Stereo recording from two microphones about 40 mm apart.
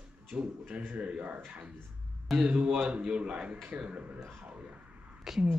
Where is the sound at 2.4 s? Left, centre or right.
Right.